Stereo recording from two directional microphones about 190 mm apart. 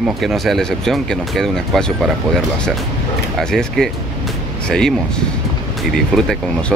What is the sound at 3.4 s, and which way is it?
Speech, 5° left (ahead or behind).